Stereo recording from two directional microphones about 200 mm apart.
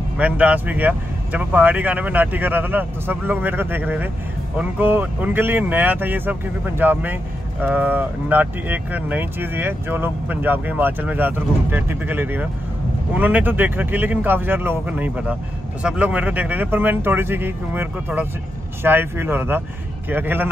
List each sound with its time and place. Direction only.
0.2 s speech: 5° right (ahead or behind)